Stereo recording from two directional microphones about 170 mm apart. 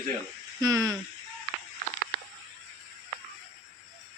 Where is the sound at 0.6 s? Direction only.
20° right (ahead or behind).